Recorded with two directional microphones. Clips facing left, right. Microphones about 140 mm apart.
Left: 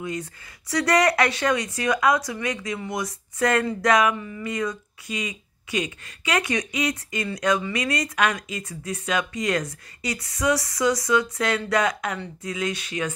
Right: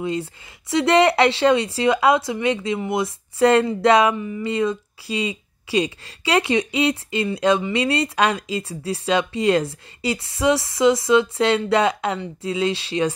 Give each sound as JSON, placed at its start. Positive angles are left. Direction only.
{"t": 0.0, "sound": "speech", "side_deg": -30}